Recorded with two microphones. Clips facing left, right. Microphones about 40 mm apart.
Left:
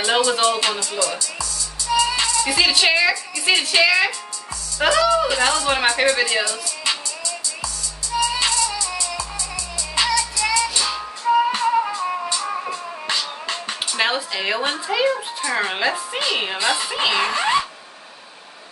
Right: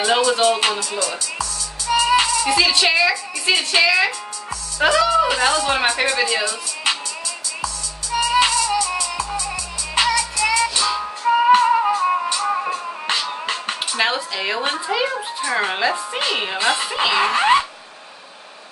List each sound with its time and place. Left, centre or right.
0.0 s speech: centre
0.7 s music: centre
2.0 s music: right
2.4 s a woman's voice: centre
5.0 s music: centre
5.4 s a woman's voice: centre
8.1 s music: right
8.5 s music: centre
9.9 s music: right
13.9 s a woman's voice: centre
16.5 s music: centre
16.9 s a woman's voice: centre
17.3 s zipper: right